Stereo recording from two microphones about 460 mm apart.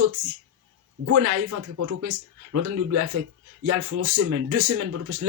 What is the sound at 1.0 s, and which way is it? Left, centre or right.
Speech, right.